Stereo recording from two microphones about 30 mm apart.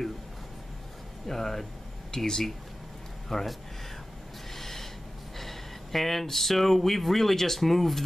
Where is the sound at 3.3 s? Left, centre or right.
Centre.